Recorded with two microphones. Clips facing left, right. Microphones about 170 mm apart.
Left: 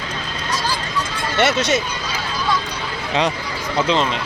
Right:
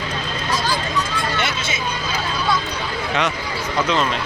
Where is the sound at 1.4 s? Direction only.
70° left (ahead or behind).